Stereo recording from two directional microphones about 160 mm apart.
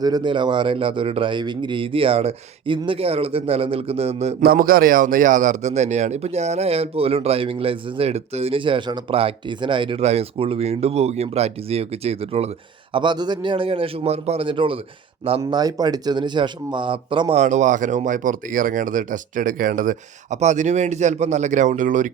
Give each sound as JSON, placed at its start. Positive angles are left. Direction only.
{"t": 0.0, "sound": "a man's voice", "side_deg": -25}
{"t": 4.4, "sound": "a man's voice", "side_deg": -65}
{"t": 17.3, "sound": "speech", "side_deg": -50}